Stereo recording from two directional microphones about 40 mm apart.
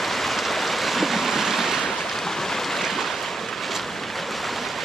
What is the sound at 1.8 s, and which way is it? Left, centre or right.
Boat, centre.